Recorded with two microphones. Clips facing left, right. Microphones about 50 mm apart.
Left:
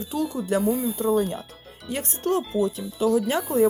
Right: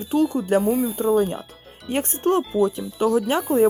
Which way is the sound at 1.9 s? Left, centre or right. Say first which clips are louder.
Right 4 dB; right.